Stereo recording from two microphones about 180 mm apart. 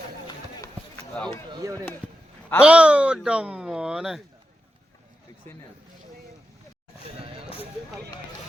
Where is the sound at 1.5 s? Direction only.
15° right (ahead or behind).